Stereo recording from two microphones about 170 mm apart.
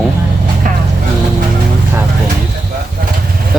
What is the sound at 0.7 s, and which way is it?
Vehicle, 50° right (ahead or behind).